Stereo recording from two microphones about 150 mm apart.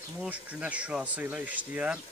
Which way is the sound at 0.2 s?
10° right (ahead or behind).